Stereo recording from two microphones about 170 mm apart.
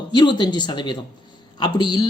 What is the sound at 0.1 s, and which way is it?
Speech, 25° left (ahead or behind).